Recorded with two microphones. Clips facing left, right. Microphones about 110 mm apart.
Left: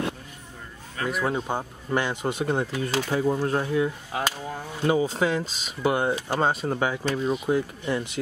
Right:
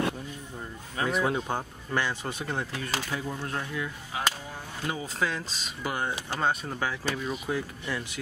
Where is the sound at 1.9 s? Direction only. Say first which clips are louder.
Left 5 dB; 20° left (ahead or behind).